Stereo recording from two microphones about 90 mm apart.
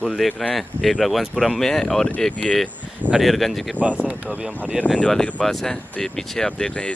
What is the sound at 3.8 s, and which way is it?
Speech, 15° right (ahead or behind).